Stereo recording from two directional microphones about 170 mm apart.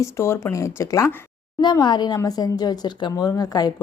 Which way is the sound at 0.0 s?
15° left (ahead or behind).